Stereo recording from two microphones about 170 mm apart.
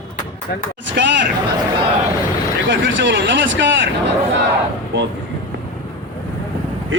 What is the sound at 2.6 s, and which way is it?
Speech, 90° right.